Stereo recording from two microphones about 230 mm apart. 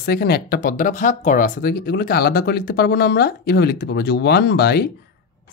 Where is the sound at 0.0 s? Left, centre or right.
Left.